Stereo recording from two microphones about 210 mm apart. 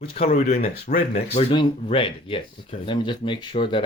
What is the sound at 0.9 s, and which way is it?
Speech, 40° left (ahead or behind).